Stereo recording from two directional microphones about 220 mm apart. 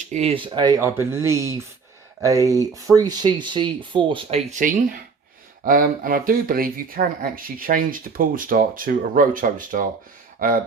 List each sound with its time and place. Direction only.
0.1 s speech: 30° right (ahead or behind)